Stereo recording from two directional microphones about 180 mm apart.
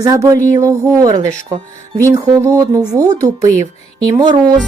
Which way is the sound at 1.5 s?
35° right (ahead or behind).